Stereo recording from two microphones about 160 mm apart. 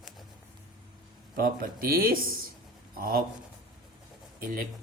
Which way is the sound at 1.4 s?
65° right (ahead or behind).